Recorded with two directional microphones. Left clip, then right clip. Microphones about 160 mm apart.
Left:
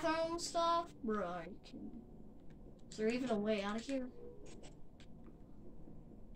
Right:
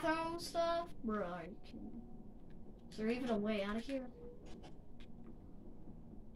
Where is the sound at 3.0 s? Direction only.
35° left (ahead or behind).